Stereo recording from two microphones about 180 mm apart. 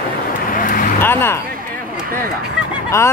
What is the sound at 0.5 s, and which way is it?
Vehicle, 50° left (ahead or behind).